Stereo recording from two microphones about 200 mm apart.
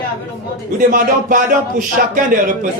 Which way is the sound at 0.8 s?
40° right (ahead or behind).